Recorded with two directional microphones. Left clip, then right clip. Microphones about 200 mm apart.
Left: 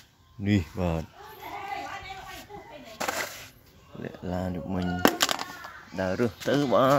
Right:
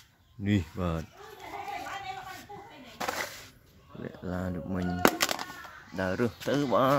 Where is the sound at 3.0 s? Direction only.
20° left (ahead or behind).